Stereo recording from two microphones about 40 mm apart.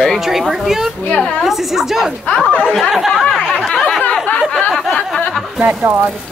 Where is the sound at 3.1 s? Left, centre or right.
Centre.